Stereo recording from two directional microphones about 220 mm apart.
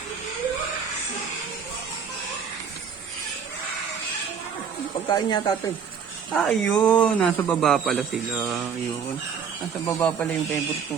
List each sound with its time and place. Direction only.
5.0 s speech: 20° left (ahead or behind)
6.3 s speech: centre (ahead or behind)
9.8 s a man's voice: 10° left (ahead or behind)